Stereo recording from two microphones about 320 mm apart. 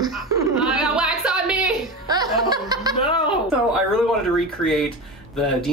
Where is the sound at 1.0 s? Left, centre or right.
Centre.